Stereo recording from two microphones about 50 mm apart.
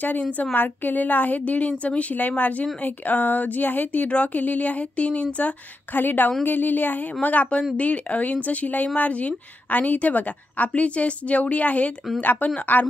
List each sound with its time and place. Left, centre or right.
0.4 s a woman's voice: left
5.9 s a woman's voice: left